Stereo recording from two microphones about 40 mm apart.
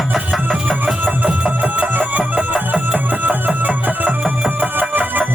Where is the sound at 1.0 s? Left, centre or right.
Right.